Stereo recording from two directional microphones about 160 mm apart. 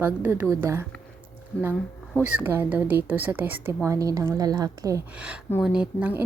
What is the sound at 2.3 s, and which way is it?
A woman's voice, 10° right (ahead or behind).